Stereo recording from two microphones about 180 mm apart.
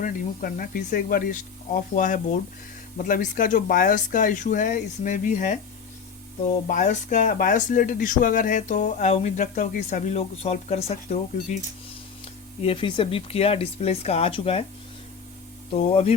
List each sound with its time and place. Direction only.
0.0 s speech: 50° left (ahead or behind)
6.7 s speech: 45° left (ahead or behind)
12.6 s speech: 30° left (ahead or behind)
15.7 s speech: 35° left (ahead or behind)